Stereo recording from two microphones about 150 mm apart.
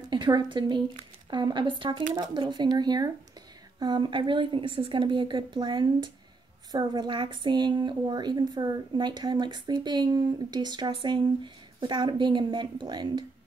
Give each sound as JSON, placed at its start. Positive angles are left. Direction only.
{"t": 0.1, "sound": "a woman's voice", "side_deg": -30}